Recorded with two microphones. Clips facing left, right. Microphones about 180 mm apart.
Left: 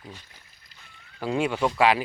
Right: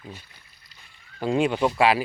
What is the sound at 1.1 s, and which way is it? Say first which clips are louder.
Speech: right 3 dB; 25° right (ahead or behind).